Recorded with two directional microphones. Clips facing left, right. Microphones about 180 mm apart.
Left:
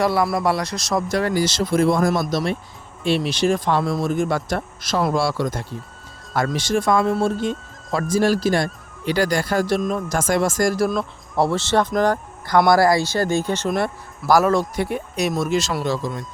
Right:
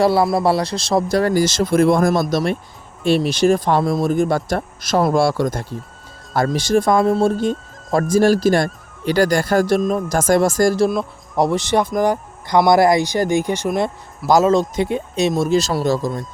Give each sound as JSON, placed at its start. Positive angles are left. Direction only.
{"t": 0.0, "sound": "speech", "side_deg": -30}
{"t": 10.8, "sound": "speech", "side_deg": -15}